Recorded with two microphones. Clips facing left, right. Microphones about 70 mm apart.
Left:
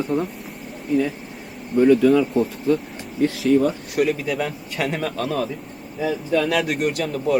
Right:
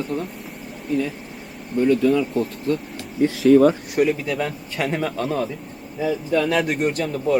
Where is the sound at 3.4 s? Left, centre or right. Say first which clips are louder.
Right 6 dB; right.